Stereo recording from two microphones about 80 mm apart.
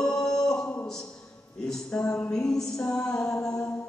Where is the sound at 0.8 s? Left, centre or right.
Centre.